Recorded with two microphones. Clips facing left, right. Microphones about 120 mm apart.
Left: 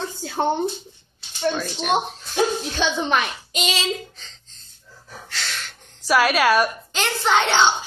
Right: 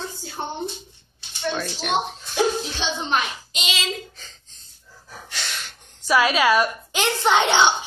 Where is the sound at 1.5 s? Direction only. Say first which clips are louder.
Left 1 dB; 5° left (ahead or behind).